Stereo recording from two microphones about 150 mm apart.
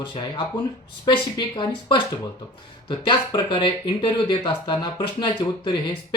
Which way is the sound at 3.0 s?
30° left (ahead or behind).